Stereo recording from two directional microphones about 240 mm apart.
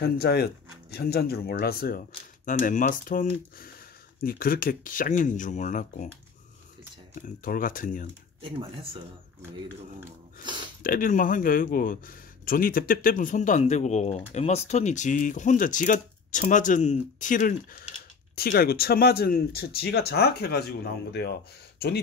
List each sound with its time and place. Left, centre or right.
0.0 s speech: left
7.2 s speech: left
8.4 s speech: right
9.9 s a sound: centre
10.8 s speech: left